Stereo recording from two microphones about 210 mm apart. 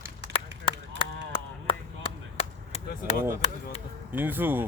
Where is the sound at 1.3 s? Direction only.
25° left (ahead or behind).